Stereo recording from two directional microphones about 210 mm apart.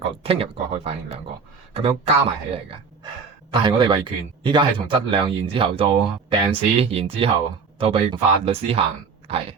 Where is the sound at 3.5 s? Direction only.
20° right (ahead or behind).